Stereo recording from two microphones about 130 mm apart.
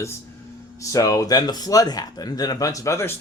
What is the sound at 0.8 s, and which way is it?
Speech, 25° left (ahead or behind).